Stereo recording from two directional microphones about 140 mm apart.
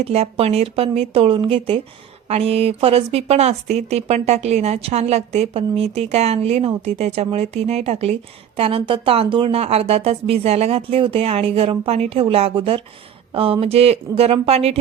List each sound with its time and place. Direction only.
0.0 s a woman's voice: 45° right (ahead or behind)